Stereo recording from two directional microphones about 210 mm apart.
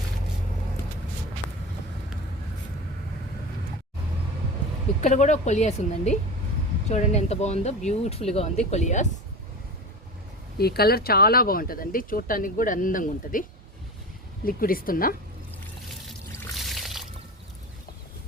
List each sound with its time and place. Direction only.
4.9 s speech: 35° left (ahead or behind)
10.6 s speech: 50° left (ahead or behind)
14.4 s speech: 45° left (ahead or behind)
16.4 s pour: centre (ahead or behind)